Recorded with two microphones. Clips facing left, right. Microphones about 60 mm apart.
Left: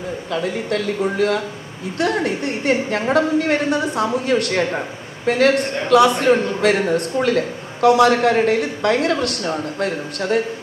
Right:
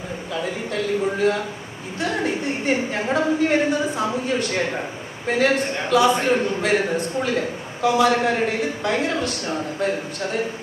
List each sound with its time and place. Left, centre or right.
0.3 s a woman's voice: left